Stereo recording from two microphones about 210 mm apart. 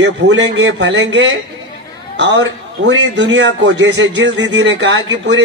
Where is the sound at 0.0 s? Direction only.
55° right (ahead or behind).